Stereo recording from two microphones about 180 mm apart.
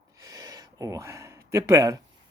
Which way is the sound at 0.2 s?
20° right (ahead or behind).